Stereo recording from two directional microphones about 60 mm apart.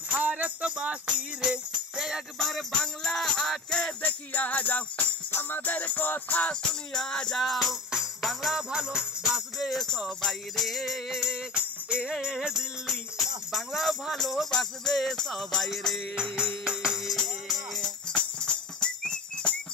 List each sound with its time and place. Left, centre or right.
0.1 s music: right; by 2.2 s centre
2.3 s music: centre
4.0 s music: left
6.5 s music: centre
16.2 s music: centre